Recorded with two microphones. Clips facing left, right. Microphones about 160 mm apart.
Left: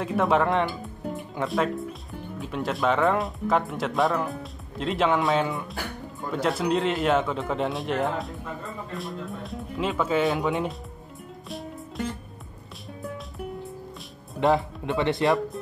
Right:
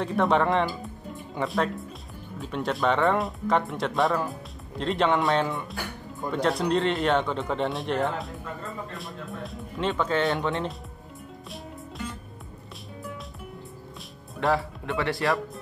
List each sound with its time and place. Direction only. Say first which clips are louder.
0.0 s speech: even; centre (ahead or behind)
14.3 s speech: left 3 dB; 20° left (ahead or behind)